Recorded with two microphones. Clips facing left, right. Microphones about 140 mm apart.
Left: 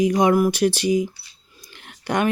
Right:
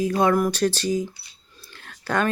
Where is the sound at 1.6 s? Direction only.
15° left (ahead or behind).